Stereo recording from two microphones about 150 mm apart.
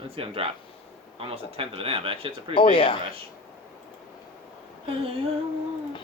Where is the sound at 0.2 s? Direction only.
40° right (ahead or behind).